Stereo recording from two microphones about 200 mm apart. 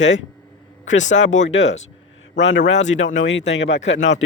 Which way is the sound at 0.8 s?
35° left (ahead or behind).